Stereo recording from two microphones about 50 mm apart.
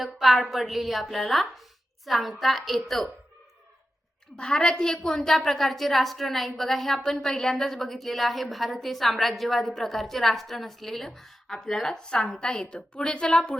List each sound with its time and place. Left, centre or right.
0.0 s a woman's voice: centre
4.4 s a woman's voice: centre